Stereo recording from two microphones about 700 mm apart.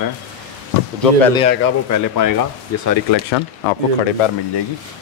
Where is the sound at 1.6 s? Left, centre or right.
Left.